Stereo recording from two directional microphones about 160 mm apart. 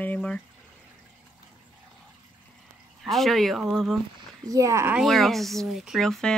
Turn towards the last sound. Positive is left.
turn(degrees=0)  # may be behind; listen again after turning